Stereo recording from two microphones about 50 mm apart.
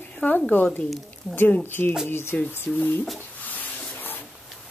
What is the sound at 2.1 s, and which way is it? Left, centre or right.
Speech, left.